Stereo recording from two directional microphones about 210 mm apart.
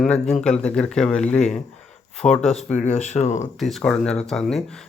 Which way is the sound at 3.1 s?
35° left (ahead or behind).